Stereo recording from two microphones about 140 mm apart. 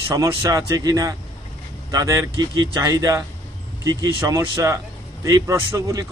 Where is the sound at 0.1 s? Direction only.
25° right (ahead or behind).